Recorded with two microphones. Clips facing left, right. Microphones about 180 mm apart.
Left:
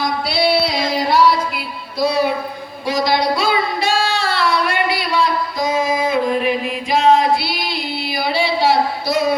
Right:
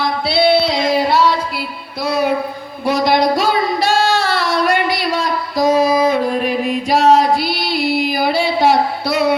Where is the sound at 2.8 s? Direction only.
60° right (ahead or behind).